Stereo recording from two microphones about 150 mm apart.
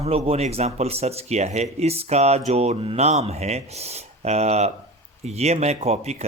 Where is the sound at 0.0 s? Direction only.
45° right (ahead or behind).